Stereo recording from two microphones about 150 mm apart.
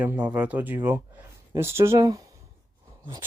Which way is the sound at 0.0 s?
10° right (ahead or behind).